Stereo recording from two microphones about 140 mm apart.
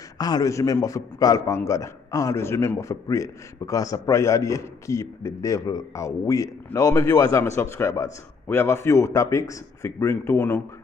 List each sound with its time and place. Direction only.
0.2 s a man's voice: 25° left (ahead or behind)